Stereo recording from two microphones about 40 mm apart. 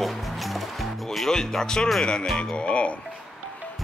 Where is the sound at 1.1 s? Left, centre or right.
Centre; by 2.9 s left.